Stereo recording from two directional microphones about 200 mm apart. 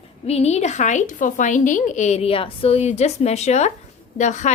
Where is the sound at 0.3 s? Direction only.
30° left (ahead or behind).